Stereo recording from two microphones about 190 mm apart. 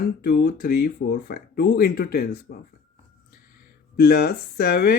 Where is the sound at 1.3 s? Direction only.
55° left (ahead or behind).